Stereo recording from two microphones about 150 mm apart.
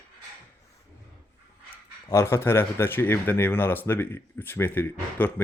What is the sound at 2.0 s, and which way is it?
Speech, 15° left (ahead or behind).